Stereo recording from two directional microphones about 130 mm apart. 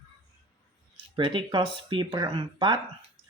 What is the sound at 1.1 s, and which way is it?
Speech, 40° right (ahead or behind).